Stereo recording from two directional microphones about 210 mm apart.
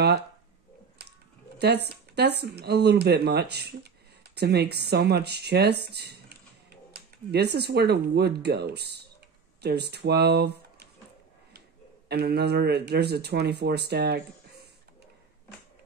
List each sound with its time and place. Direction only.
1.0 s bird: 50° right (ahead or behind)
1.6 s speech: 50° right (ahead or behind)
12.1 s speech: 50° right (ahead or behind)